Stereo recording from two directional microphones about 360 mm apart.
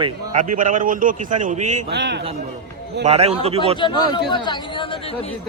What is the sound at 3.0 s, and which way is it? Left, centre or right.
Speech, centre.